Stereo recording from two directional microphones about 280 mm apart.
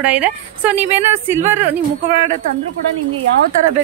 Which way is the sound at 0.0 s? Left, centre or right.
Centre.